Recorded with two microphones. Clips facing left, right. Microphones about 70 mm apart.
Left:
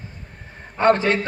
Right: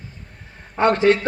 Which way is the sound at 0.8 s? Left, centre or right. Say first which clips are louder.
Right 1 dB; left.